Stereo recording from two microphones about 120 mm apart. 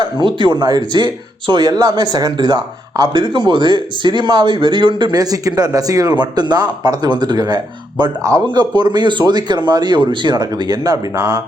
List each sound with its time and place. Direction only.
0.0 s speech: 40° right (ahead or behind)